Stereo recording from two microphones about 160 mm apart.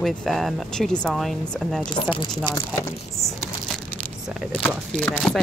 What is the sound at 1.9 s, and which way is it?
Speech, 30° left (ahead or behind).